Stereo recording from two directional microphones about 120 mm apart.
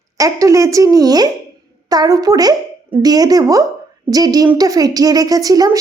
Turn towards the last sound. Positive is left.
turn(degrees=-30)  # may be behind; listen again after turning